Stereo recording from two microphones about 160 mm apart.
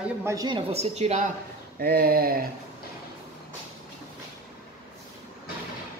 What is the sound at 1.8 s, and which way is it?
Speech, 70° right (ahead or behind).